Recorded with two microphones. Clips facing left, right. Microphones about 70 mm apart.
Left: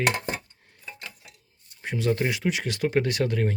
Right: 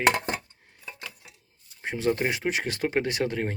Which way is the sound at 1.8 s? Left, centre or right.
Right.